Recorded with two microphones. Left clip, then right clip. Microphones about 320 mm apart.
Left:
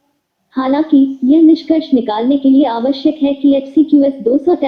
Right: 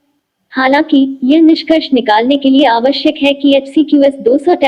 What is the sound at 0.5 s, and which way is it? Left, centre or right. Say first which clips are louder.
A woman's voice: right 3 dB; right.